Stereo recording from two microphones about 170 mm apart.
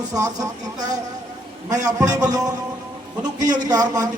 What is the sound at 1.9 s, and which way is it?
Speech, 20° right (ahead or behind).